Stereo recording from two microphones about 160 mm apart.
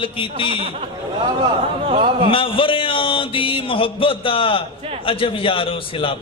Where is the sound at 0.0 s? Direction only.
35° left (ahead or behind).